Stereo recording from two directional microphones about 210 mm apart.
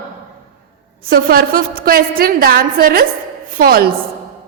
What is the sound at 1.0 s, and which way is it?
A woman's voice, 45° right (ahead or behind).